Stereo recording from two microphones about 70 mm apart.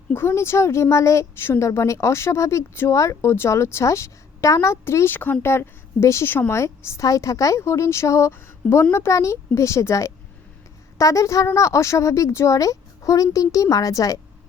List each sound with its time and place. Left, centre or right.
0.1 s a woman's voice: left